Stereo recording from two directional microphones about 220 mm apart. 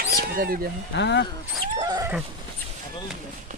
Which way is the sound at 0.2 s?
40° right (ahead or behind).